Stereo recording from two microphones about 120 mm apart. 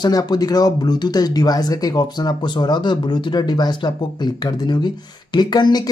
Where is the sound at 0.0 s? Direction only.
35° left (ahead or behind).